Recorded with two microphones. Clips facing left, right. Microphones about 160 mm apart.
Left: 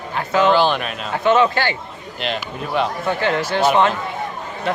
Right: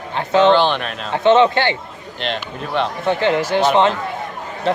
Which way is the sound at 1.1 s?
25° right (ahead or behind).